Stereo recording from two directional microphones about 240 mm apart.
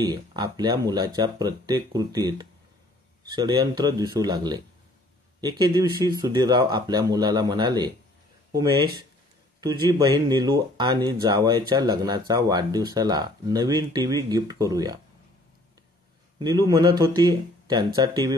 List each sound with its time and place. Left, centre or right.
0.0 s speech: centre
16.3 s speech: centre